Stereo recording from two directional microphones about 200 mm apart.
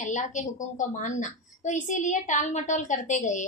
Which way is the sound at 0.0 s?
40° left (ahead or behind).